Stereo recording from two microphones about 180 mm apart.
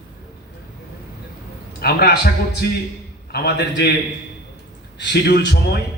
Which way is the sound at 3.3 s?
65° left (ahead or behind).